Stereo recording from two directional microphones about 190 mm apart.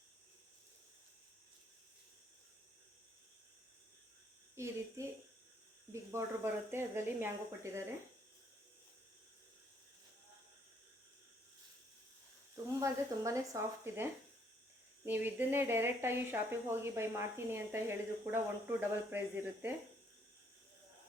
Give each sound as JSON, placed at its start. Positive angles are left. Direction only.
{"t": 4.5, "sound": "speech", "side_deg": -15}
{"t": 12.8, "sound": "speech", "side_deg": -15}